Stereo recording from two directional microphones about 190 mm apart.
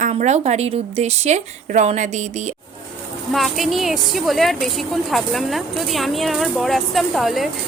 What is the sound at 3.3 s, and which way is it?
A woman's voice, centre (ahead or behind).